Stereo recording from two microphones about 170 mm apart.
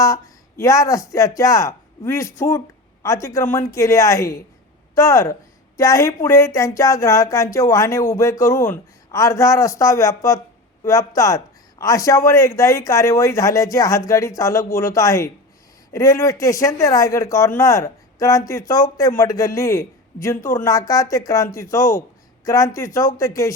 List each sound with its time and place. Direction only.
0.0 s speech: 20° left (ahead or behind)